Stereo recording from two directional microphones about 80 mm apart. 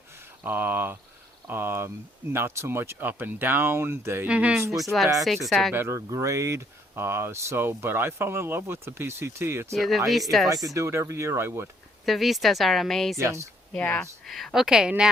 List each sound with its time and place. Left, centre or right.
0.4 s speech: right
4.3 s a woman's voice: centre
4.8 s speech: centre
5.7 s speech: right
6.1 s speech: right
9.7 s speech: centre
10.8 s speech: right
12.0 s speech: centre
13.1 s speech: right
13.7 s speech: centre
14.3 s a woman's voice: centre